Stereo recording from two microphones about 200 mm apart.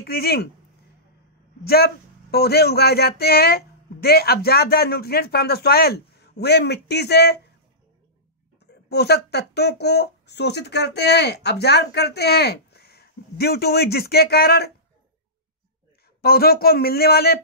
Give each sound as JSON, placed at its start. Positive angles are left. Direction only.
{"t": 0.0, "sound": "speech", "side_deg": 50}
{"t": 1.6, "sound": "speech", "side_deg": 50}
{"t": 8.8, "sound": "speech", "side_deg": 55}
{"t": 16.2, "sound": "speech", "side_deg": 50}